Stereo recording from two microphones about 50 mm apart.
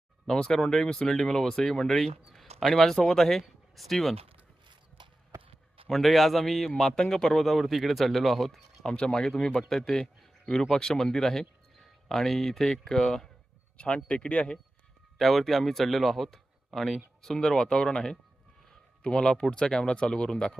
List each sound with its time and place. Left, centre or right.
0.3 s speech: centre
5.9 s speech: centre
13.7 s speech: left
15.2 s speech: centre